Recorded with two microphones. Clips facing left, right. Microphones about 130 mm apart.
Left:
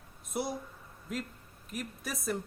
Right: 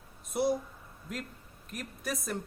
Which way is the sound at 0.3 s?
Centre (ahead or behind).